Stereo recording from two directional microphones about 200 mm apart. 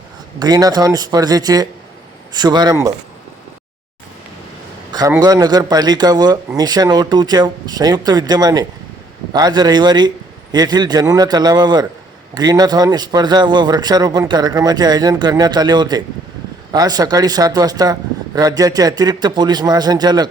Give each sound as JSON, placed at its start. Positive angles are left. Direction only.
{"t": 0.3, "sound": "a man's voice", "side_deg": -20}
{"t": 4.9, "sound": "a sound", "side_deg": -20}
{"t": 5.2, "sound": "a man's voice", "side_deg": -20}